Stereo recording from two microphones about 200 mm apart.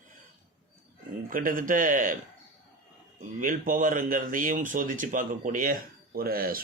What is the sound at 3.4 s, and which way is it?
Speech, 45° right (ahead or behind).